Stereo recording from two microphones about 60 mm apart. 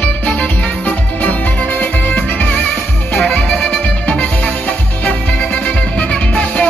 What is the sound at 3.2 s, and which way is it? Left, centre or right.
Music, centre.